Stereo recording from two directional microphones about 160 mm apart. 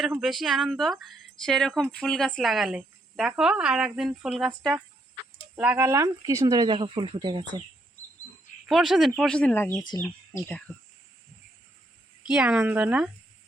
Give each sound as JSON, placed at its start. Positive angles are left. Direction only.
{"t": 0.2, "sound": "speech", "side_deg": 0}
{"t": 8.6, "sound": "speech", "side_deg": 0}
{"t": 12.2, "sound": "speech", "side_deg": -5}